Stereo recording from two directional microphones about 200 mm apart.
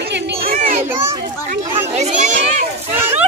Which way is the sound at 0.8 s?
10° right (ahead or behind).